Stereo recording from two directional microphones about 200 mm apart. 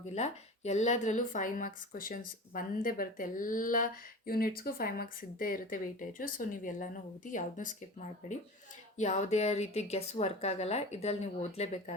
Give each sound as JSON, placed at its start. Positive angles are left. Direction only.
{"t": 0.1, "sound": "speech", "side_deg": 35}
{"t": 9.0, "sound": "speech", "side_deg": 35}